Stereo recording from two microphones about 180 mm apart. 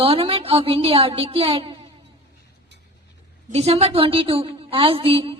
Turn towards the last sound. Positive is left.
turn(degrees=-30)  # may be behind; listen again after turning